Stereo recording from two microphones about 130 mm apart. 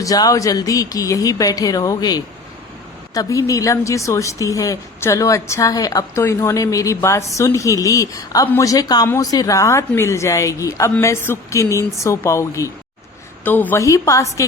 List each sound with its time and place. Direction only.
0.0 s a woman's voice: 25° left (ahead or behind)